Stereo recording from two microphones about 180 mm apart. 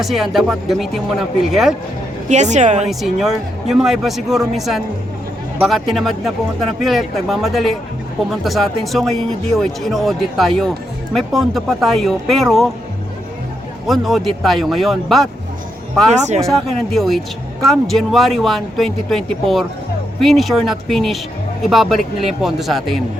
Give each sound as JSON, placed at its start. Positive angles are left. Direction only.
{"t": 0.0, "sound": "speech", "side_deg": 0}
{"t": 2.3, "sound": "a woman's voice", "side_deg": -40}
{"t": 3.0, "sound": "speech", "side_deg": 0}
{"t": 13.8, "sound": "speech", "side_deg": 0}
{"t": 16.1, "sound": "a woman's voice", "side_deg": -40}
{"t": 16.5, "sound": "speech", "side_deg": 0}